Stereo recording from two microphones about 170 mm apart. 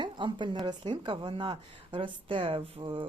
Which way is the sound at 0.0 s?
30° right (ahead or behind).